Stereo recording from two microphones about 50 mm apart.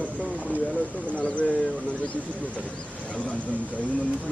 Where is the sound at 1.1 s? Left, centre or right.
Left.